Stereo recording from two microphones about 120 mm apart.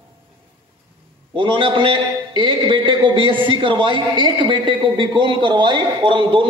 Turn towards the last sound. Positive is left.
turn(degrees=-45)  # may be behind; listen again after turning